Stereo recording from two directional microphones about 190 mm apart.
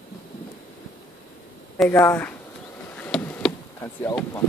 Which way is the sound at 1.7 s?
10° left (ahead or behind).